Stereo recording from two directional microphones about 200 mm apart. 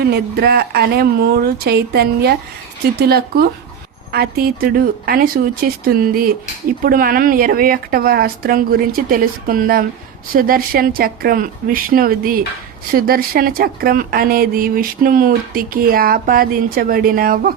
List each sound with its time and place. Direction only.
0.0 s speech: 55° right (ahead or behind)